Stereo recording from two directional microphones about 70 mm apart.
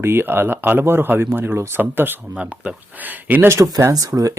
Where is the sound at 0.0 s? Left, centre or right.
Right.